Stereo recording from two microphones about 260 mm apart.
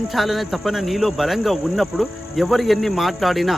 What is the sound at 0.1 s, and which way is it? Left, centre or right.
Cricket, centre.